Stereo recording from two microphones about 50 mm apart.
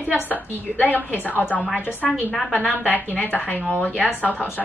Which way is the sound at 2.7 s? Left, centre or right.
Left.